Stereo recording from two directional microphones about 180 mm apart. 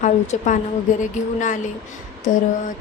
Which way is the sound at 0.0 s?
45° left (ahead or behind).